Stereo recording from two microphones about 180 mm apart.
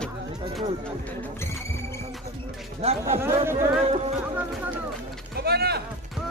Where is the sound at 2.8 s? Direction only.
35° right (ahead or behind).